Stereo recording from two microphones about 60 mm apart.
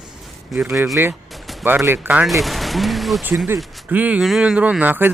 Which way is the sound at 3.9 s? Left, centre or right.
Right.